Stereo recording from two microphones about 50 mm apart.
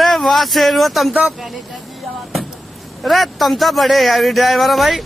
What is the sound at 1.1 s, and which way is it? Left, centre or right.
Speech, right.